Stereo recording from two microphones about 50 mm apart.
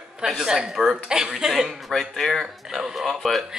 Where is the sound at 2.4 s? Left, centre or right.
Centre.